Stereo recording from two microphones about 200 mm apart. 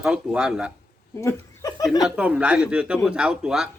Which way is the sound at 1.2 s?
15° left (ahead or behind).